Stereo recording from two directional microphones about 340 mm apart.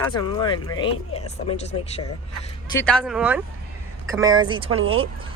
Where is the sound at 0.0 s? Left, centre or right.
Centre.